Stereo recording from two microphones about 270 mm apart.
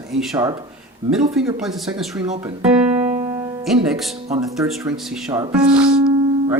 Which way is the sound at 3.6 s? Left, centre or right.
Centre.